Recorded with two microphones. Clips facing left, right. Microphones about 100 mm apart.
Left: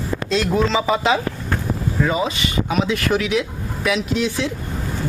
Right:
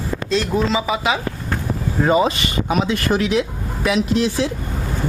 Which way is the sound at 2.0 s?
45° right (ahead or behind).